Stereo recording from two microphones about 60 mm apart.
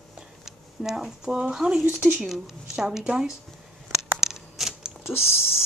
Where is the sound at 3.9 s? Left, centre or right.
Centre.